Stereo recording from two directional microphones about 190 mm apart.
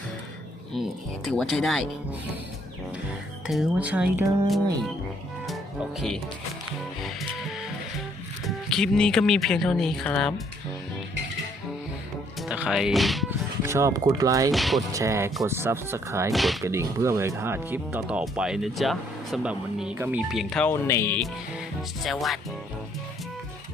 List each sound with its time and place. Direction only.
0.7 s speech: centre (ahead or behind)
3.4 s speech: 5° right (ahead or behind)
7.0 s speech: centre (ahead or behind)
12.4 s speech: 5° right (ahead or behind)
13.7 s speech: 15° right (ahead or behind)
14.5 s speech: centre (ahead or behind)
14.9 s speech: 15° right (ahead or behind)
16.3 s speech: centre (ahead or behind)
16.6 s speech: 15° right (ahead or behind); by 21.2 s 15° left (ahead or behind)
22.0 s speech: centre (ahead or behind)